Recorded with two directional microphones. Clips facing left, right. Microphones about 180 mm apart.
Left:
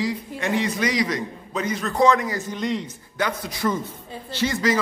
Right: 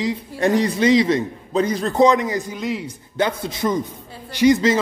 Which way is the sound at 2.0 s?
20° right (ahead or behind).